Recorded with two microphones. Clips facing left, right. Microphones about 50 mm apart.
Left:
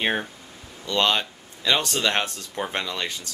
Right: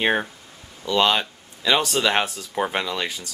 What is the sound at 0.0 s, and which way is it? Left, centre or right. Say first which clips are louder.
Speech: right 3 dB; centre.